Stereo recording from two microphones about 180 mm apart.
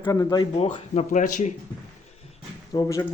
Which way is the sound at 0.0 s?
20° left (ahead or behind).